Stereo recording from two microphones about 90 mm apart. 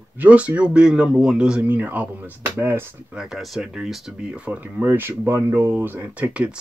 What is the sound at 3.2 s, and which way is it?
Speech, 5° right (ahead or behind).